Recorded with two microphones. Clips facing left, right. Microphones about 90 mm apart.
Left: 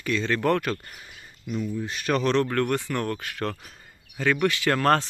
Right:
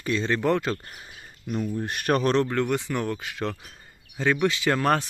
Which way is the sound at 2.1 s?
35° right (ahead or behind).